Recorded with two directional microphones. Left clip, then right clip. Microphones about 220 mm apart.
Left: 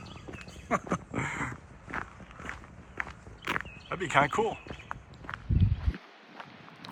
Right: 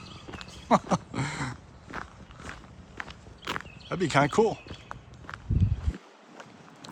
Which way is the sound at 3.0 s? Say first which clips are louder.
Left 2 dB; 5° right (ahead or behind).